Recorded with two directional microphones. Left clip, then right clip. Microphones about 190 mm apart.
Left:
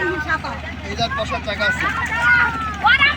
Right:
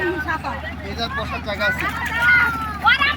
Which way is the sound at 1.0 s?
30° left (ahead or behind).